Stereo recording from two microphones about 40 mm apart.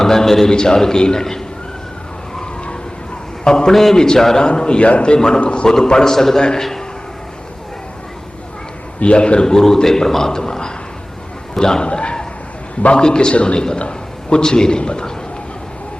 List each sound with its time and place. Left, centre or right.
0.0 s a man's voice: centre
3.4 s a sound: centre
3.7 s a man's voice: centre; by 5.6 s left
5.6 s a man's voice: centre
9.0 s a man's voice: left
9.5 s a man's voice: centre